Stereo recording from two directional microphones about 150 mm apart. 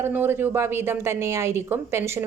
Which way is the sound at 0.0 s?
15° right (ahead or behind).